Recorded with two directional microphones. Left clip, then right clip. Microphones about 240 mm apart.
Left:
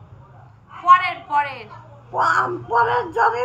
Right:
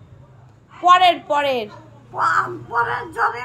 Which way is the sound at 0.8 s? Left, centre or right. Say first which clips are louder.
Right 2 dB; right.